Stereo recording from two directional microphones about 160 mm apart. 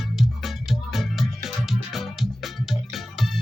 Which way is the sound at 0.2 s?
Centre (ahead or behind).